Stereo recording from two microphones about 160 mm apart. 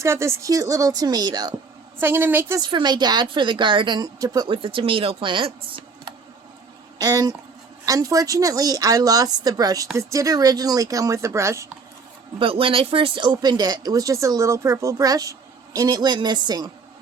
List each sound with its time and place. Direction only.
0.0 s speech: 15° right (ahead or behind)
2.0 s a woman's voice: 15° right (ahead or behind)
2.6 s speech: 25° right (ahead or behind)
12.4 s speech: 35° right (ahead or behind)